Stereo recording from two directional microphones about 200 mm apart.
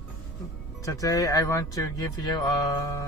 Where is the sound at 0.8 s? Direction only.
15° left (ahead or behind).